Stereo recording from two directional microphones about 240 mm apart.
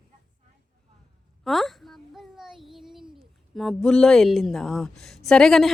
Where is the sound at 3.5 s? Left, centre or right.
Centre.